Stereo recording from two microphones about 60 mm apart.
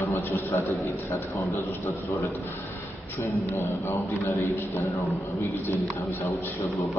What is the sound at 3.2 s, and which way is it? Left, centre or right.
A man's voice, left.